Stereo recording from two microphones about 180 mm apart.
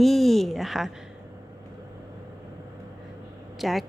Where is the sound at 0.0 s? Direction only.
Centre (ahead or behind).